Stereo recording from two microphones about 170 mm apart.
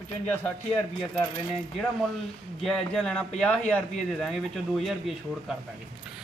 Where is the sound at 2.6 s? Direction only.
5° left (ahead or behind).